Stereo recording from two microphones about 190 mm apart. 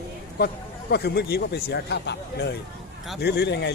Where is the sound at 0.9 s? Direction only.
60° left (ahead or behind).